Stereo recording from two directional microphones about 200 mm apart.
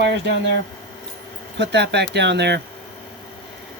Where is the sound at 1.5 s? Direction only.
60° right (ahead or behind).